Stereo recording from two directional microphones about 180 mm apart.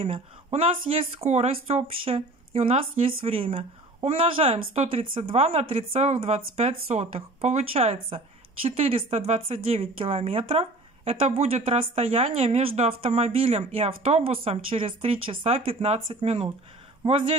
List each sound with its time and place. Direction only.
0.0 s a man's voice: 35° right (ahead or behind)